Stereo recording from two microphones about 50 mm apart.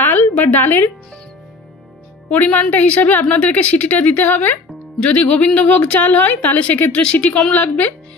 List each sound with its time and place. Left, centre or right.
0.0 s a sound: left
2.2 s a woman's voice: left
5.0 s a woman's voice: left
7.1 s speech: left
7.5 s a woman's voice: left